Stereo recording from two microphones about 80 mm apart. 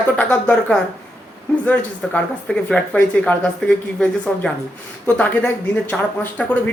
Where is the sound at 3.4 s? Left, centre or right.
Centre.